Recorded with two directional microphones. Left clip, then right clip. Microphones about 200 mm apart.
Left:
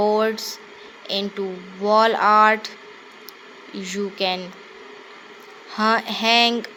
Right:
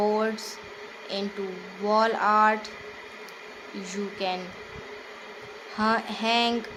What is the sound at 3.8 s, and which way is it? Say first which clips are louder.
Speech: left 7 dB; 20° left (ahead or behind).